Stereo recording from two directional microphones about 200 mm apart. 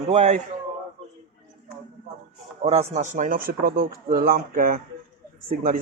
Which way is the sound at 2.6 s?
30° right (ahead or behind).